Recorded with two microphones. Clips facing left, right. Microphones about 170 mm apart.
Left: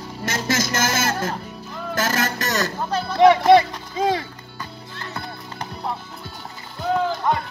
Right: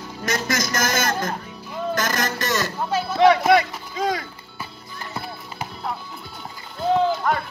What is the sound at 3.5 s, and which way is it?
Run, 25° left (ahead or behind).